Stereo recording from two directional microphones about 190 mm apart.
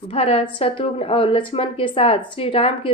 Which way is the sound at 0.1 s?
30° left (ahead or behind).